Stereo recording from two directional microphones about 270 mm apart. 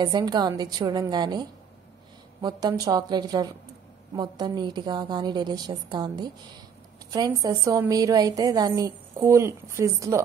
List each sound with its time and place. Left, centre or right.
0.0 s a woman's voice: centre